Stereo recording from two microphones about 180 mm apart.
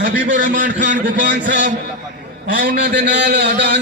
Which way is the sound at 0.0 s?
45° right (ahead or behind).